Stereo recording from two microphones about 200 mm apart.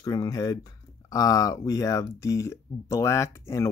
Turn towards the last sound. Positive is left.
turn(degrees=15)  # may be behind; listen again after turning